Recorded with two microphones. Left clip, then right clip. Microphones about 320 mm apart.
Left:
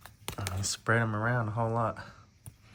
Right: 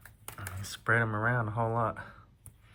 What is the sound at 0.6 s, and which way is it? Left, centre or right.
Speech, centre.